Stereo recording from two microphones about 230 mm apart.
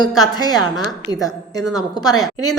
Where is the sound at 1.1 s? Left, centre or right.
Right.